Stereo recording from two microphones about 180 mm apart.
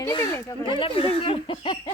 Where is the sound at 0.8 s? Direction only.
30° left (ahead or behind).